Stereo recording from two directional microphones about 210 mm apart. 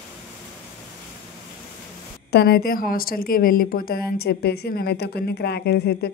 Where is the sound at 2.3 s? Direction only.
50° left (ahead or behind).